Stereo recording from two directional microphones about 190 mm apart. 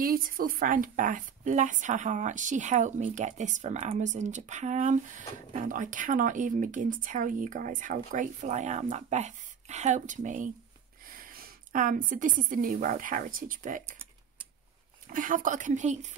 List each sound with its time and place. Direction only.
0.0 s a woman's voice: 50° right (ahead or behind)
15.0 s a woman's voice: 45° right (ahead or behind)